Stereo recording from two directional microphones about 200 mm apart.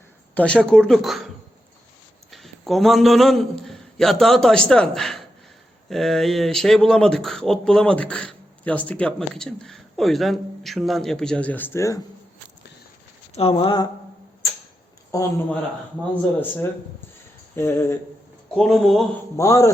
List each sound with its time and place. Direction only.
0.3 s speech: 5° left (ahead or behind)
2.3 s a man's voice: centre (ahead or behind)
13.3 s speech: 30° left (ahead or behind)
15.1 s speech: 15° left (ahead or behind)
17.5 s speech: 15° left (ahead or behind)
18.5 s speech: centre (ahead or behind)
19.4 s speech: 15° left (ahead or behind)